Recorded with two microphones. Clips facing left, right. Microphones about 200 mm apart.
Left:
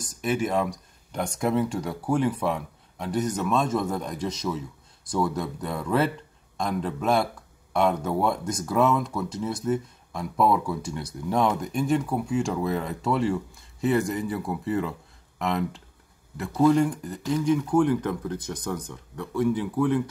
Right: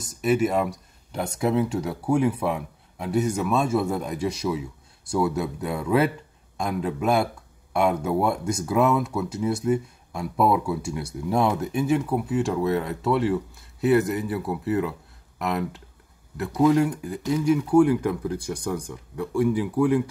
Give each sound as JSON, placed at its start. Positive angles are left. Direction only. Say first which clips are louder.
{"t": 0.0, "sound": "speech", "louder": "right 5 dB", "side_deg": -5}